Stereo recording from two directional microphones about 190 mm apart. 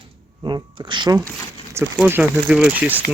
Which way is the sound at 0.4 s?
25° right (ahead or behind).